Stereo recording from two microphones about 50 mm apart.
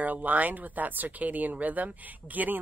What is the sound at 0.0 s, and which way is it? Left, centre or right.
Speech, right.